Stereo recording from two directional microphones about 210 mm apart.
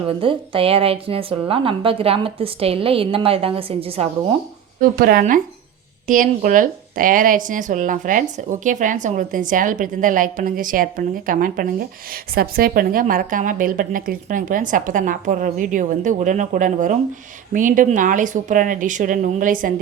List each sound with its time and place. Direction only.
0.2 s a woman's voice: 25° right (ahead or behind)
4.8 s speech: 45° right (ahead or behind)